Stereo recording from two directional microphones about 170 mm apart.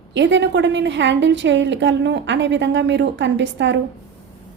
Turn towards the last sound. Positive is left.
turn(degrees=-90)